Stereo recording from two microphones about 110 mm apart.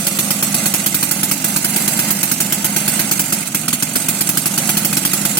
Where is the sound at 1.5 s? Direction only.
15° left (ahead or behind).